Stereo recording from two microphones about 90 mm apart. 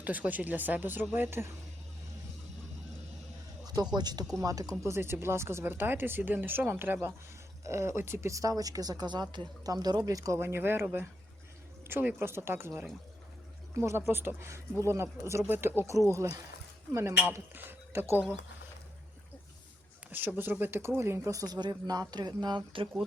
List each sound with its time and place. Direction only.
0.0 s speech: 20° right (ahead or behind)
3.9 s speech: 50° right (ahead or behind); by 18.2 s 25° right (ahead or behind)
20.1 s speech: 20° right (ahead or behind); by 22.9 s 65° right (ahead or behind)